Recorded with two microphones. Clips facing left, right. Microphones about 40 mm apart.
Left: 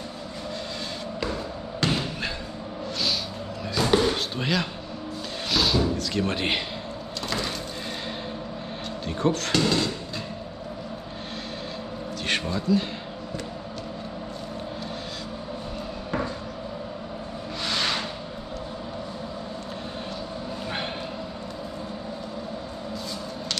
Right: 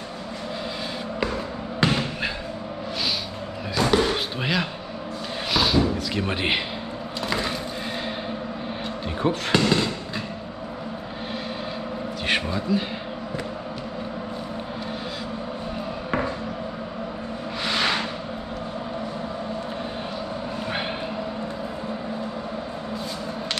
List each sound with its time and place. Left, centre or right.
1.8 s basketball bounce: centre
3.7 s a sound: centre
9.0 s speech: centre
12.3 s a man's voice: centre
17.6 s vehicle: centre